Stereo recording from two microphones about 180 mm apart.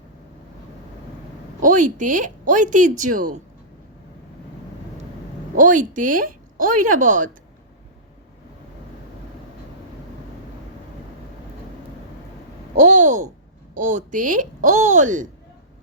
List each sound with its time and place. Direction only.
1.6 s speech: 45° right (ahead or behind)
5.5 s speech: 45° right (ahead or behind)
12.7 s speech: 40° right (ahead or behind)